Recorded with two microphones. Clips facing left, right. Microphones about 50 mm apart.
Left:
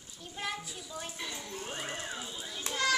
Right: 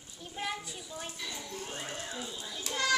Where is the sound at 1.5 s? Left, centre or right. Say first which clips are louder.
Left 1 dB; left.